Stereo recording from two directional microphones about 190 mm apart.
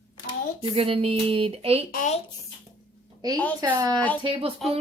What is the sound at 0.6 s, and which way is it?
Speech, 30° right (ahead or behind).